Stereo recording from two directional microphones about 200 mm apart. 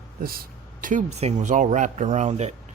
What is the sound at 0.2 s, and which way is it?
Speech, 45° right (ahead or behind).